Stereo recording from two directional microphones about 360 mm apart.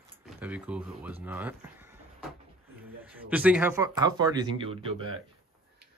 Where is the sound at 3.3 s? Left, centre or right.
Centre.